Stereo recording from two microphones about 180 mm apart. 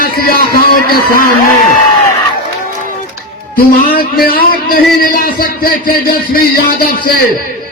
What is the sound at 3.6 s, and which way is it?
A man's voice, 55° left (ahead or behind).